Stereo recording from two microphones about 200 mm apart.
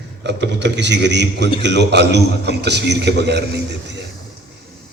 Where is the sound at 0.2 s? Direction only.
60° right (ahead or behind).